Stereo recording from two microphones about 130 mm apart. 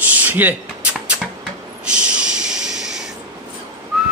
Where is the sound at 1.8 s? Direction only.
5° right (ahead or behind).